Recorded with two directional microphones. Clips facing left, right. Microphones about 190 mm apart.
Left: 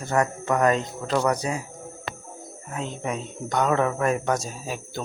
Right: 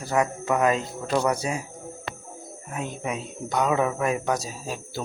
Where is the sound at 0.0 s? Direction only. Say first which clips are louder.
Even; 5° right (ahead or behind).